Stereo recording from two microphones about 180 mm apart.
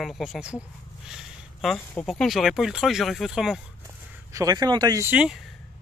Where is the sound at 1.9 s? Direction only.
5° left (ahead or behind).